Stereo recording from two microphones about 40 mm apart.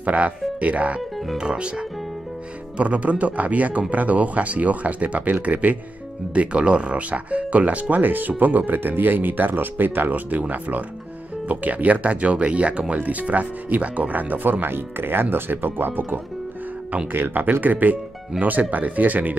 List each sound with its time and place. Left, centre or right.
0.0 s speech: right
2.8 s speech: right
7.9 s speech: right
11.4 s speech: right
13.0 s speech: right